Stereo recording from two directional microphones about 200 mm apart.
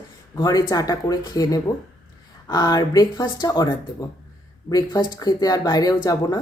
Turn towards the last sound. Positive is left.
turn(degrees=20)  # may be behind; listen again after turning